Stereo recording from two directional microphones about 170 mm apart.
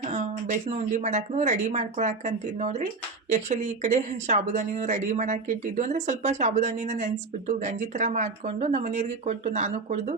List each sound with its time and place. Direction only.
0.0 s speech: 40° right (ahead or behind)